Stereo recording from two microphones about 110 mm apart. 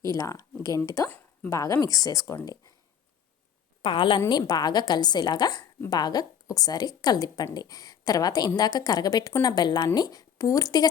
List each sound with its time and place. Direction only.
0.2 s a woman's voice: 30° left (ahead or behind)
3.8 s a woman's voice: 50° left (ahead or behind)
4.3 s a woman's voice: 35° left (ahead or behind)